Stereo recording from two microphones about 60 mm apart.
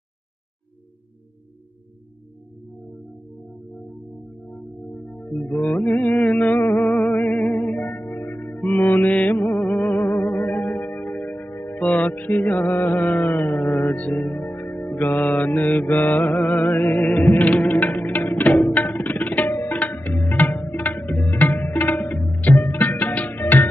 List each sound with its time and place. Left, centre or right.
4.5 s music: left
11.8 s music: left
19.3 s tabla: left
22.4 s music: left